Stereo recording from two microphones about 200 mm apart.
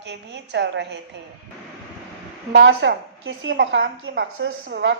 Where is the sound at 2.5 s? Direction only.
65° right (ahead or behind).